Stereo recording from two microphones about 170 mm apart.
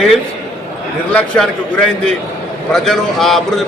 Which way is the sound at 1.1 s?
5° left (ahead or behind).